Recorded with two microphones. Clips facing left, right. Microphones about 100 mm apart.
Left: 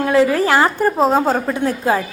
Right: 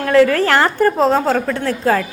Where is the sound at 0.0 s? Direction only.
10° left (ahead or behind).